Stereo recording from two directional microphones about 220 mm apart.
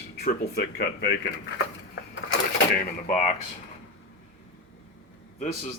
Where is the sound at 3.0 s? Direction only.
35° left (ahead or behind).